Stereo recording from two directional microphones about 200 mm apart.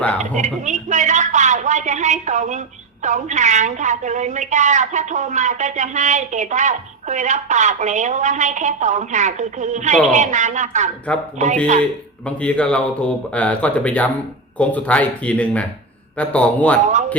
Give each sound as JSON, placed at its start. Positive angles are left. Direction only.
{"t": 0.2, "sound": "a woman's voice", "side_deg": -40}
{"t": 12.2, "sound": "speech", "side_deg": 5}
{"t": 16.8, "sound": "a man's voice", "side_deg": -40}